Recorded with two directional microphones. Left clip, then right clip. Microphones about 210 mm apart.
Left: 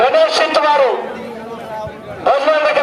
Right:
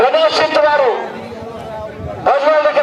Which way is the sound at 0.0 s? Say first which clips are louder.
Even; 40° left (ahead or behind).